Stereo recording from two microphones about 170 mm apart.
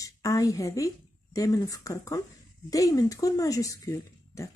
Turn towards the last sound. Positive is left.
turn(degrees=20)  # may be behind; listen again after turning